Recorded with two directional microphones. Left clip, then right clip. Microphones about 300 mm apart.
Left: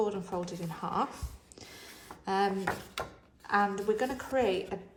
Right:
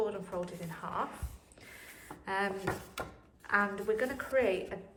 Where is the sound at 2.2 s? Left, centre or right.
Centre.